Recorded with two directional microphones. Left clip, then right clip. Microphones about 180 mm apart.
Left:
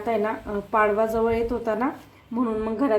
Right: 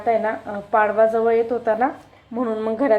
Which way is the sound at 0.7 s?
15° right (ahead or behind).